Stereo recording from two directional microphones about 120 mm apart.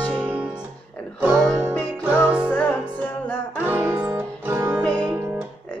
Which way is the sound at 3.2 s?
15° left (ahead or behind).